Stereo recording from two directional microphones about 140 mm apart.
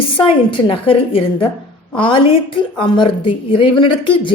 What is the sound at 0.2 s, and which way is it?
A woman's voice, 35° left (ahead or behind).